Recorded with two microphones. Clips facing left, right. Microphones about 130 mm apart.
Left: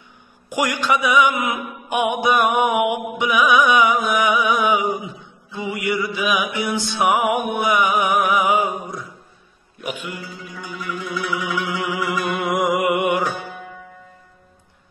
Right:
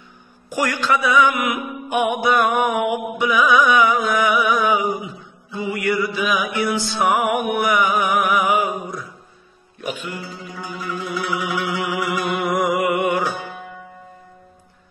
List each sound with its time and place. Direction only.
0.5 s music: 15° left (ahead or behind)
9.8 s music: 15° left (ahead or behind)
10.2 s music: 25° right (ahead or behind)
11.3 s a sound: 20° right (ahead or behind)
12.4 s a sound: 20° left (ahead or behind)
13.2 s music: centre (ahead or behind)